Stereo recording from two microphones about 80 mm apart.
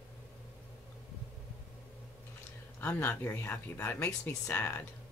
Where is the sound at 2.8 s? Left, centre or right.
Left.